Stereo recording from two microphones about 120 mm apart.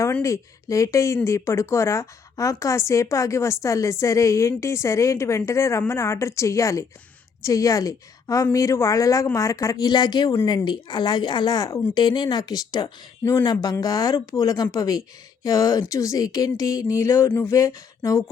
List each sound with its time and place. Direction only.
0.2 s speech: 25° left (ahead or behind)
13.2 s speech: 20° left (ahead or behind)